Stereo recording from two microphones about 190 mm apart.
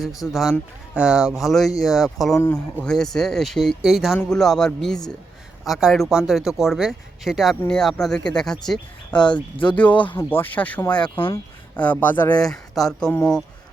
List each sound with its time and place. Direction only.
0.2 s speech: centre (ahead or behind)
2.4 s speech: 10° left (ahead or behind)
10.9 s speech: 25° left (ahead or behind)
11.8 s speech: 10° left (ahead or behind)